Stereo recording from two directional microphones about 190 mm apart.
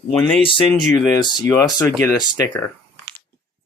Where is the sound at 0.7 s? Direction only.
20° left (ahead or behind).